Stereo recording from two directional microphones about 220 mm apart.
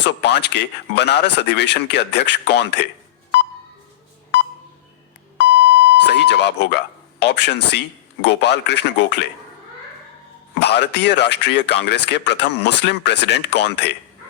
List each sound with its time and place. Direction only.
0.0 s speech: 50° left (ahead or behind)
5.6 s speech: 50° left (ahead or behind)
10.6 s speech: 50° left (ahead or behind)